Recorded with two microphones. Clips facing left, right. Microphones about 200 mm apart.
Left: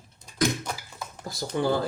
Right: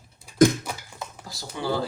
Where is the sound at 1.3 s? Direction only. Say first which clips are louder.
Left 3 dB; 50° left (ahead or behind).